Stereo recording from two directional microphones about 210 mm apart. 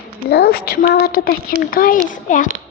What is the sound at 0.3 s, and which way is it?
A child's voice, 50° left (ahead or behind).